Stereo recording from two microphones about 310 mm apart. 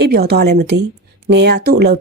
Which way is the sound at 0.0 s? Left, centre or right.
Right.